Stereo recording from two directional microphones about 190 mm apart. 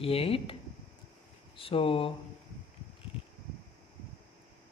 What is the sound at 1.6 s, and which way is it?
Speech, 30° left (ahead or behind).